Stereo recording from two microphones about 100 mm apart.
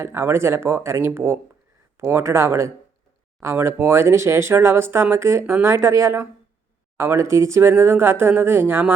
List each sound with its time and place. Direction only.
0.0 s speech: 25° right (ahead or behind)